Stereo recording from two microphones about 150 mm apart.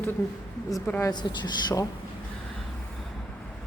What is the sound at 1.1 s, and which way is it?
Speech, 30° left (ahead or behind).